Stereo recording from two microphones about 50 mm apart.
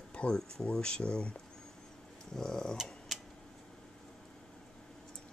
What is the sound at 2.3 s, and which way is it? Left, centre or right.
Speech, centre.